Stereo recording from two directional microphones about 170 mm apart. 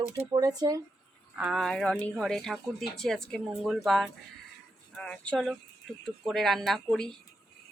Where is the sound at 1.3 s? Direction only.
5° right (ahead or behind).